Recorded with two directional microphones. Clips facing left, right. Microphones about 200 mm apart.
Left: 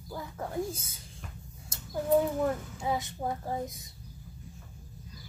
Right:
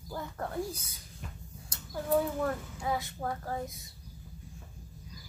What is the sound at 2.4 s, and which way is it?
Speech, 20° left (ahead or behind).